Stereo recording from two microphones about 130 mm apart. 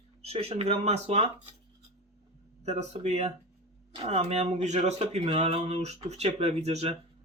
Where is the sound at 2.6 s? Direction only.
60° right (ahead or behind).